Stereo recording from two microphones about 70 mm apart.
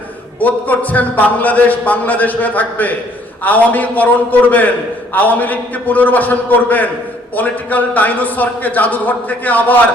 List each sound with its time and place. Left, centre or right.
0.3 s a man's voice: left